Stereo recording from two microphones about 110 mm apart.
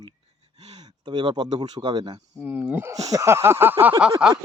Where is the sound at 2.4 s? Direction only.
15° right (ahead or behind).